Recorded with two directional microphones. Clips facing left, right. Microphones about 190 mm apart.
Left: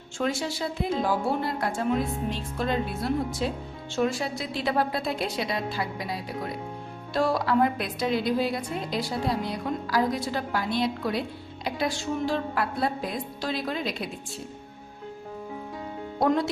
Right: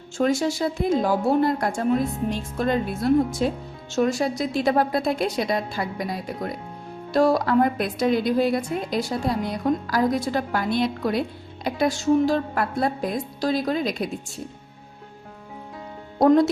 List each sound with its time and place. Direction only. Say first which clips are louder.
0.2 s speech: right 7 dB; 45° right (ahead or behind)
16.2 s speech: right 8 dB; 40° right (ahead or behind)